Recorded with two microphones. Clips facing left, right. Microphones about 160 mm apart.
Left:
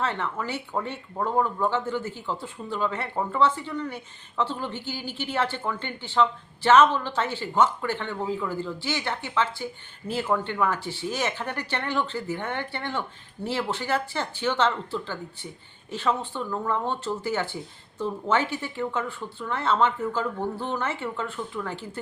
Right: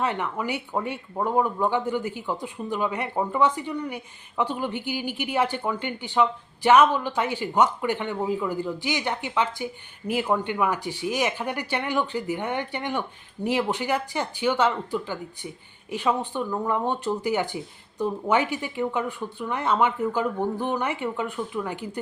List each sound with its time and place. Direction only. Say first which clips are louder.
0.0 s speech: right 2 dB; 15° right (ahead or behind)